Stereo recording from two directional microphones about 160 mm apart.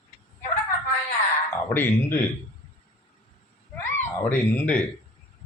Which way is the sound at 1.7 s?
10° left (ahead or behind).